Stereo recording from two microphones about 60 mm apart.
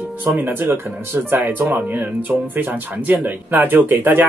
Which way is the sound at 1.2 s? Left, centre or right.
Right.